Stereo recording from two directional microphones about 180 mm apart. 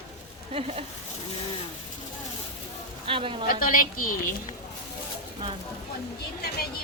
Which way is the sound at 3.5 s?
50° left (ahead or behind).